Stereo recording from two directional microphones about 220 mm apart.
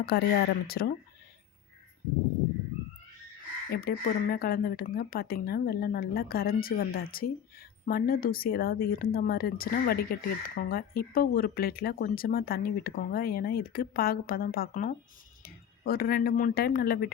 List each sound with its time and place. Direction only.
0.0 s speech: 45° left (ahead or behind)
3.7 s speech: 45° left (ahead or behind)